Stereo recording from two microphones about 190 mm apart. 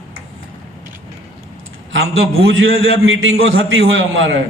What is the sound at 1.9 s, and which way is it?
A man's voice, 90° right.